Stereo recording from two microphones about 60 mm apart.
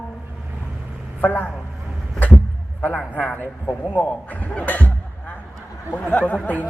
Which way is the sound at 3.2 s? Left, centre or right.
Left.